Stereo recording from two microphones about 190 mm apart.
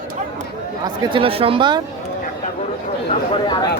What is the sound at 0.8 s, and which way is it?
Speech, 25° right (ahead or behind).